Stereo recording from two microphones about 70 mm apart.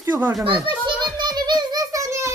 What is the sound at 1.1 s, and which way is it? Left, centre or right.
Music, right.